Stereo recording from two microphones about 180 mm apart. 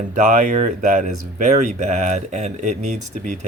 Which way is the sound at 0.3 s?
45° right (ahead or behind).